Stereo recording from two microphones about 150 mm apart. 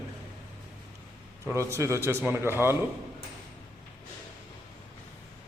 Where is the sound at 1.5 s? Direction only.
20° right (ahead or behind).